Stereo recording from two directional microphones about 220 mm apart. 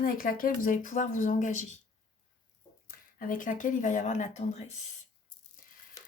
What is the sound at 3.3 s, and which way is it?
Speech, 35° left (ahead or behind).